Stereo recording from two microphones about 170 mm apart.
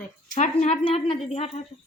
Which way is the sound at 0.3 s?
40° left (ahead or behind).